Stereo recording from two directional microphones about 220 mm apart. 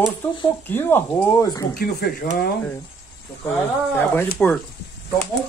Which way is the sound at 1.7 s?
45° left (ahead or behind).